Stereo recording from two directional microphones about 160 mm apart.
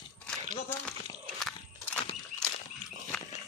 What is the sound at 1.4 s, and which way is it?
Biting, centre (ahead or behind).